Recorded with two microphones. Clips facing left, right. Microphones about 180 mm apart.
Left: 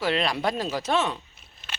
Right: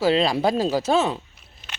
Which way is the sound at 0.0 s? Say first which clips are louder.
Right 6 dB; 30° right (ahead or behind).